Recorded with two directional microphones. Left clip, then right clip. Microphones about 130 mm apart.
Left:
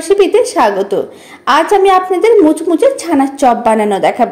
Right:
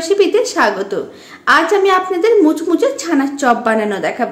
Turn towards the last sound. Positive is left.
turn(degrees=35)  # may be behind; listen again after turning